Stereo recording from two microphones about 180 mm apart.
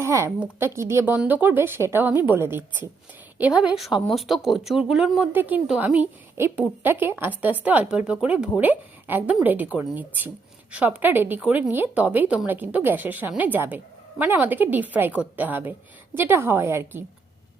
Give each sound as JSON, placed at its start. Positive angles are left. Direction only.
{"t": 0.0, "sound": "a woman's voice", "side_deg": -15}